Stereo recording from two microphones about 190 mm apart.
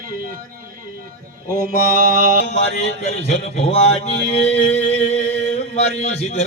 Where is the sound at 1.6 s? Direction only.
50° right (ahead or behind).